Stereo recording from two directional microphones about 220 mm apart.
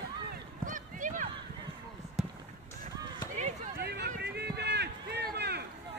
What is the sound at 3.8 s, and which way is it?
Run, 45° right (ahead or behind).